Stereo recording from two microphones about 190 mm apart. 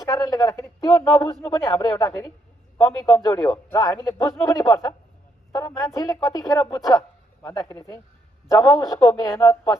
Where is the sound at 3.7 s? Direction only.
15° left (ahead or behind).